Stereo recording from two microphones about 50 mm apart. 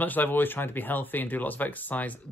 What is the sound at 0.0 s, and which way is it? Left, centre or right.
Speech, left.